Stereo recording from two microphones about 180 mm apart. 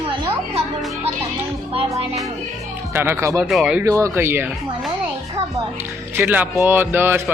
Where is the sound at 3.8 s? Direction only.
15° right (ahead or behind).